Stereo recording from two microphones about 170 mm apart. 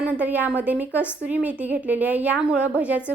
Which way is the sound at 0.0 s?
10° right (ahead or behind).